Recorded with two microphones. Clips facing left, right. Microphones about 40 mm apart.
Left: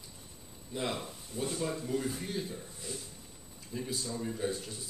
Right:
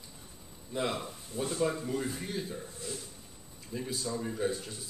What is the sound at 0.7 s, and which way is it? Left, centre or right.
Speech, centre.